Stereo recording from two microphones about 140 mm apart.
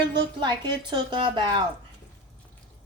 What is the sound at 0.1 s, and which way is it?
Child singing, 30° right (ahead or behind).